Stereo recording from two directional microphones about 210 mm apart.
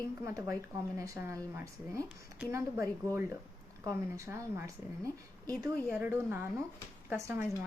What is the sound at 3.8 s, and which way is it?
Speech, 15° right (ahead or behind).